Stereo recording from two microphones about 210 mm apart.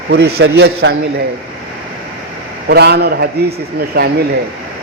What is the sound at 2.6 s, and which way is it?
A man's voice, 50° right (ahead or behind).